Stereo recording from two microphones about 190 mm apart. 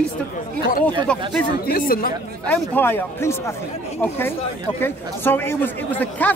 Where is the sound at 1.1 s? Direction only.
5° left (ahead or behind).